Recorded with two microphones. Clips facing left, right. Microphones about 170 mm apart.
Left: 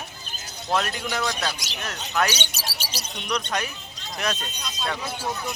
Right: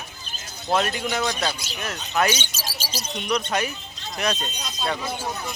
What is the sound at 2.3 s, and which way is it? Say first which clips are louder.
Speech: right 2 dB; 70° left (ahead or behind).